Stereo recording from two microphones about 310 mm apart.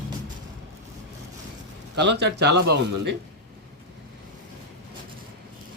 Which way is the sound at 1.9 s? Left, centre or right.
Right.